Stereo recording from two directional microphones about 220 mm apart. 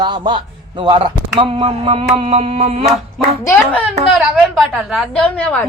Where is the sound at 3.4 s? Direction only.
10° left (ahead or behind).